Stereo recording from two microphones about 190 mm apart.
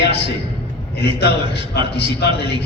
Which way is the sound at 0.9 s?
60° left (ahead or behind).